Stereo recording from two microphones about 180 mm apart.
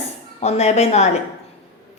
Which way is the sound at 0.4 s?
40° left (ahead or behind).